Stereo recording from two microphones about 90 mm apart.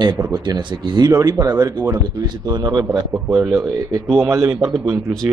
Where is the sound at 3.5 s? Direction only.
30° right (ahead or behind).